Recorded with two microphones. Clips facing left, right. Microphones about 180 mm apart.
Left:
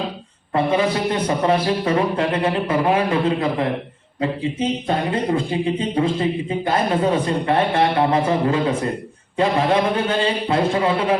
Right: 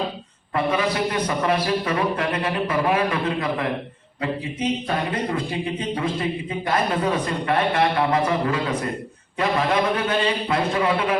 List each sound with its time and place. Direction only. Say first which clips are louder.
0.5 s speech: left 4 dB; 30° left (ahead or behind)